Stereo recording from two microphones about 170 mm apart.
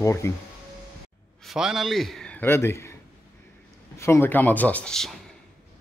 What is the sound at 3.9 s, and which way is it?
Speech, 15° left (ahead or behind).